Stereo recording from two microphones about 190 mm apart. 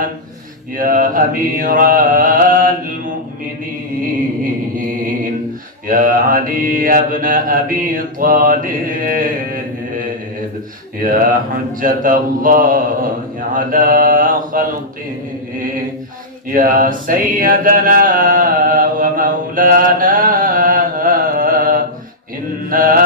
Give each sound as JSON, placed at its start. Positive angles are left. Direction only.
{"t": 0.7, "sound": "mantra", "side_deg": -45}
{"t": 4.7, "sound": "mantra", "side_deg": -45}
{"t": 16.5, "sound": "a sound", "side_deg": -45}
{"t": 22.7, "sound": "mantra", "side_deg": -50}